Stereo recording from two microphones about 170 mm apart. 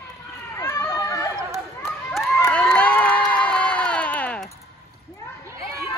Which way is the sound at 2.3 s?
10° left (ahead or behind).